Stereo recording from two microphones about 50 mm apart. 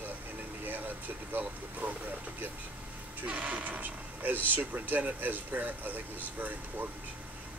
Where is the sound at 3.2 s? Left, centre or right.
Right.